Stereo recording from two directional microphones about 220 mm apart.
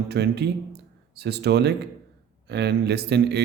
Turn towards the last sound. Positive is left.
turn(degrees=-50)  # may be behind; listen again after turning